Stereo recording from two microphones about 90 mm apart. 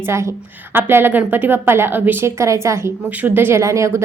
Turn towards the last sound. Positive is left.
turn(degrees=-35)  # may be behind; listen again after turning